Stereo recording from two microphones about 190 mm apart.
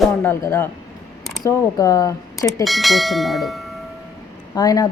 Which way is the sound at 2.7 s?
Centre (ahead or behind).